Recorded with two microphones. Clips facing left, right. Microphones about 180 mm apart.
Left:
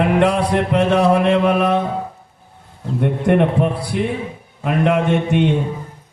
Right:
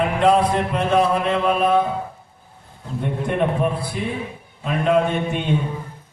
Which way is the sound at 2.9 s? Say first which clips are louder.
Left 6 dB; 65° left (ahead or behind).